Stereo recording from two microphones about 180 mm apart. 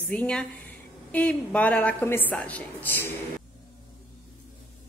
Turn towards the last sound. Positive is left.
turn(degrees=10)  # may be behind; listen again after turning